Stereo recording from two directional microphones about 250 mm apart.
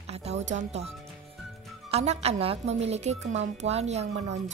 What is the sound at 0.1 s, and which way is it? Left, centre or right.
Music, right.